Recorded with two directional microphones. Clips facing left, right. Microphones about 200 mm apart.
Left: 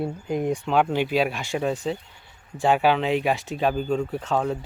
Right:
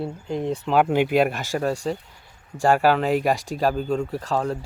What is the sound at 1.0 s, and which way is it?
Speech, 55° right (ahead or behind).